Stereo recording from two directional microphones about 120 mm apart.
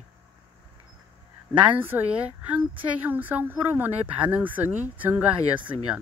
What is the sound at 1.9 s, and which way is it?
Speech, 15° right (ahead or behind).